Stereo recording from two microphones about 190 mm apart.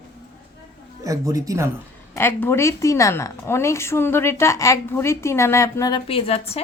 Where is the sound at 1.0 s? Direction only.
15° right (ahead or behind).